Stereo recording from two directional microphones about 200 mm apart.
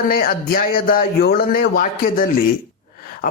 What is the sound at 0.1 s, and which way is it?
Speech, 45° left (ahead or behind).